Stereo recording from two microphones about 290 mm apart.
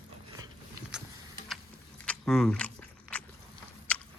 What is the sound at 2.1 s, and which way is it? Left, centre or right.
Biting, centre.